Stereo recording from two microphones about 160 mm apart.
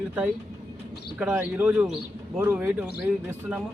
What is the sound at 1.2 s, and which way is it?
A man's voice, 5° right (ahead or behind).